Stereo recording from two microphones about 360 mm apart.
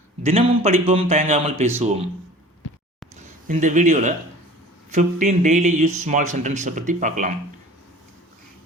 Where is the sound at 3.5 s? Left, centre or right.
Right.